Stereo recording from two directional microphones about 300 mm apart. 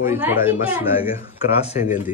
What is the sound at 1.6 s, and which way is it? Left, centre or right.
Speech, left.